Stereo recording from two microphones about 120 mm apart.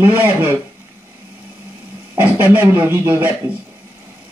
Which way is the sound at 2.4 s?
15° right (ahead or behind).